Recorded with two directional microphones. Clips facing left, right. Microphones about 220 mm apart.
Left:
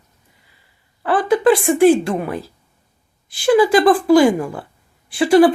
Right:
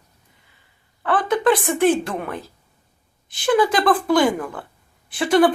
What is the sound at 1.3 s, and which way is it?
Speech, centre (ahead or behind).